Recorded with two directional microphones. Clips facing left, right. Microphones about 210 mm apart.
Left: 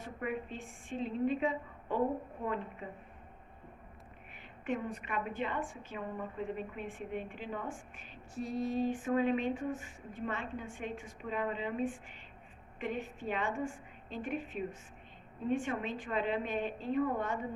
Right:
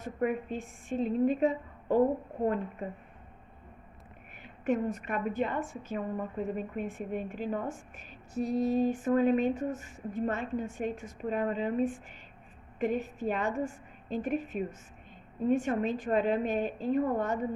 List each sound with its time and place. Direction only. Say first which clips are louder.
0.0 s a woman's voice: right 7 dB; 45° right (ahead or behind)
4.6 s a woman's voice: right 7 dB; 45° right (ahead or behind)